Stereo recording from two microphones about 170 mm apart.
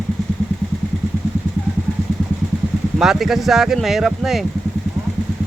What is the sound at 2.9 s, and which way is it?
Speech, centre (ahead or behind).